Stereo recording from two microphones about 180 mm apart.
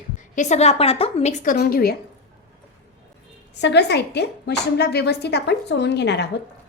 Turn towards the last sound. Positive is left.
turn(degrees=70)  # may be behind; listen again after turning